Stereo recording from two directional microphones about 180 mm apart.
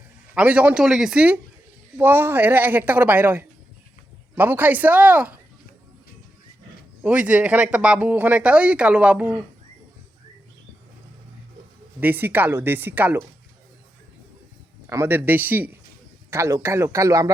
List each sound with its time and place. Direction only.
0.3 s speech: 5° right (ahead or behind)
7.0 s speech: 10° right (ahead or behind)
11.9 s speech: 10° right (ahead or behind)
14.8 s speech: 15° right (ahead or behind)